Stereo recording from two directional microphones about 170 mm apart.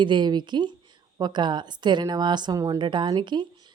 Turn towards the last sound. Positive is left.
turn(degrees=-25)  # may be behind; listen again after turning